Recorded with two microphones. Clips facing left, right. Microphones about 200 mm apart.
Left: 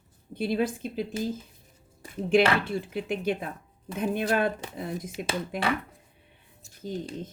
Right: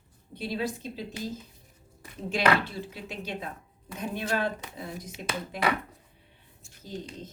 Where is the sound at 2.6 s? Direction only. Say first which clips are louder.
Left 8 dB; 55° left (ahead or behind).